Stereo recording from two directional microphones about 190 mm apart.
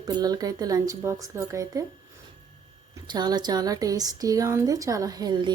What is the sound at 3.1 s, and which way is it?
Speech, 20° right (ahead or behind).